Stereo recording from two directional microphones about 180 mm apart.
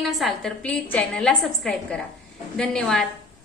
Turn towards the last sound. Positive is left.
turn(degrees=5)  # may be behind; listen again after turning